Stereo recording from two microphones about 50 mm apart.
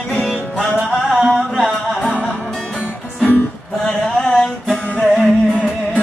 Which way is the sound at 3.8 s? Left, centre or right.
Centre.